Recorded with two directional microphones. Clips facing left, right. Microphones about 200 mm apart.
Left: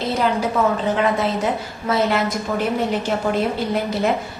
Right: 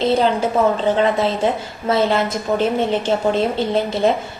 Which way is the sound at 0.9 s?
30° right (ahead or behind).